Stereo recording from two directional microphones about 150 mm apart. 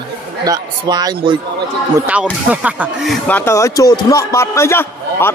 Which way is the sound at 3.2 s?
15° left (ahead or behind).